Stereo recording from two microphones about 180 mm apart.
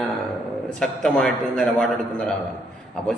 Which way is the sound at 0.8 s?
5° left (ahead or behind).